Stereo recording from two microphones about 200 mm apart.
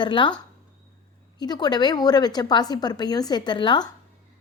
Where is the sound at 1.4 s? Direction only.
20° left (ahead or behind).